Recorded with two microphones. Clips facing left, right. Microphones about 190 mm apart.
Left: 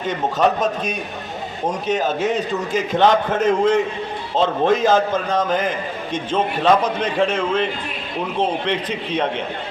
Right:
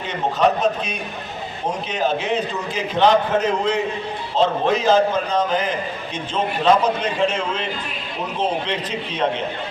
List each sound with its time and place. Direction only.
0.1 s a man's voice: 45° left (ahead or behind)